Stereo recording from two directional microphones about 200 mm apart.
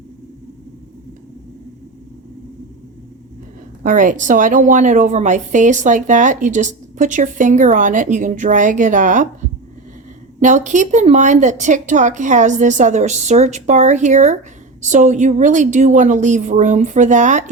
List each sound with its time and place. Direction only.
3.8 s a woman's voice: 40° right (ahead or behind)
10.4 s a woman's voice: 40° right (ahead or behind)